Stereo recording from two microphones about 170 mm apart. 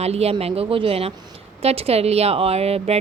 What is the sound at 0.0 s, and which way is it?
Speech, 40° right (ahead or behind).